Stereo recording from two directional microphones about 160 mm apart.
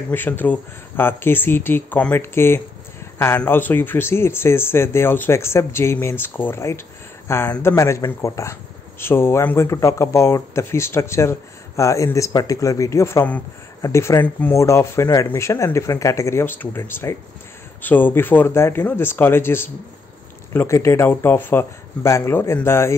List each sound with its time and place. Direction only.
0.1 s speech: 10° left (ahead or behind)